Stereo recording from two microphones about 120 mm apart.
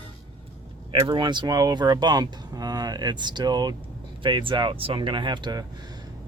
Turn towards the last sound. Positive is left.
turn(degrees=-40)  # may be behind; listen again after turning